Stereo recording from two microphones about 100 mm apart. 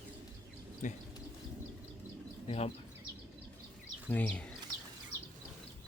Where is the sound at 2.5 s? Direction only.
90° left.